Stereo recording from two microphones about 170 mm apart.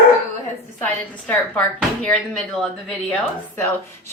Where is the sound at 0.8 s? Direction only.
10° left (ahead or behind).